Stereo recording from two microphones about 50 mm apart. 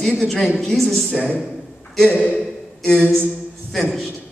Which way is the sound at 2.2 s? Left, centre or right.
Centre.